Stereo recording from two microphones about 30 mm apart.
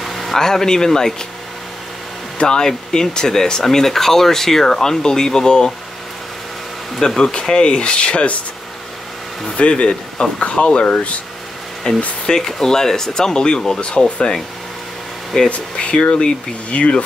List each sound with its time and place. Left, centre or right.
0.0 s a sound: centre
0.4 s speech: centre
2.4 s speech: left
7.2 s speech: left
9.6 s speech: left
12.4 s speech: centre
13.7 s speech: left
15.8 s speech: left